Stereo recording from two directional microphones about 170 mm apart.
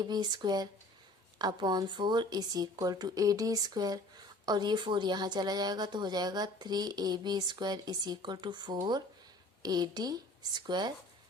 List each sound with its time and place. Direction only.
0.0 s a woman's voice: 25° right (ahead or behind)